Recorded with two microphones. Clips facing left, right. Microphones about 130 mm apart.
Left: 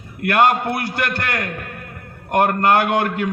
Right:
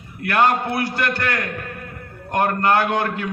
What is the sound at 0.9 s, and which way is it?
A man's voice, 50° left (ahead or behind).